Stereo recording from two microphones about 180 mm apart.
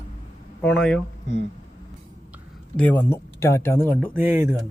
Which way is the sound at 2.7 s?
10° left (ahead or behind).